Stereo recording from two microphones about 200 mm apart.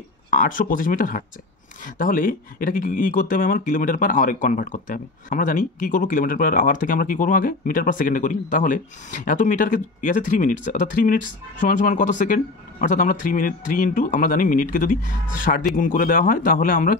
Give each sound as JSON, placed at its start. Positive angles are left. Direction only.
{"t": 0.3, "sound": "speech", "side_deg": 40}